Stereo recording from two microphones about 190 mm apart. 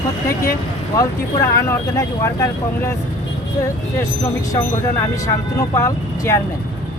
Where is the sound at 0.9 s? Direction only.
20° left (ahead or behind).